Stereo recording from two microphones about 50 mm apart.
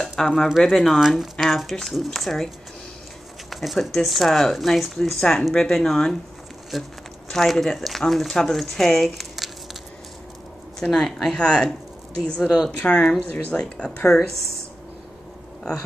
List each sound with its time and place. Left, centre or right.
0.0 s a sound: centre
0.3 s speech: centre
3.4 s a sound: centre
3.9 s speech: centre
10.8 s speech: centre
12.7 s speech: left